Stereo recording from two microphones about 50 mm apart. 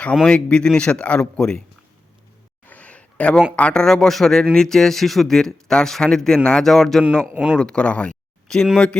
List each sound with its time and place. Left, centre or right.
0.3 s speech: left
2.6 s a sound: left
3.5 s speech: left
3.8 s speech: centre